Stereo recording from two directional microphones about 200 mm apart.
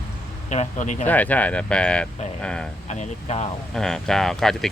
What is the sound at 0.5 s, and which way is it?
Speech, 35° left (ahead or behind).